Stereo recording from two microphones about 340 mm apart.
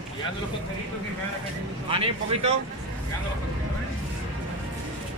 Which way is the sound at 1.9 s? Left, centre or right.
Centre.